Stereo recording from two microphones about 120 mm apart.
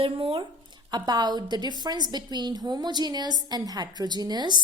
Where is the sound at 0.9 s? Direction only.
35° right (ahead or behind).